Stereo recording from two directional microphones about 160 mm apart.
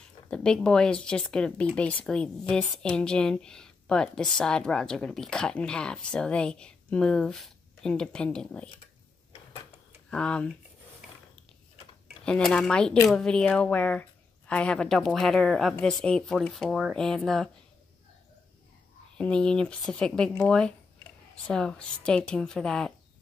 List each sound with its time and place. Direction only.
0.3 s speech: 5° left (ahead or behind)
10.0 s speech: 5° left (ahead or behind)
12.3 s speech: 5° left (ahead or behind)
19.1 s speech: 5° left (ahead or behind)